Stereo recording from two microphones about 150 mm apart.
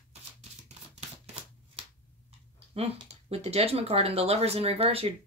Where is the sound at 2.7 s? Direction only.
40° right (ahead or behind).